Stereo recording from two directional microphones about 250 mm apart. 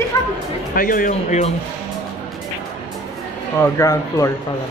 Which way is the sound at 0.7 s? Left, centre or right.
Left.